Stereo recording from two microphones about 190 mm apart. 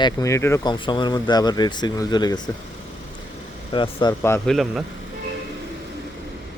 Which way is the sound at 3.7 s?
25° left (ahead or behind).